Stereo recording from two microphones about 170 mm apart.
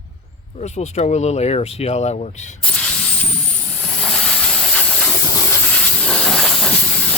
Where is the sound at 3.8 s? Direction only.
5° left (ahead or behind).